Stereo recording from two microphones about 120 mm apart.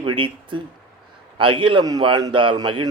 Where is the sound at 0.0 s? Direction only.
45° right (ahead or behind).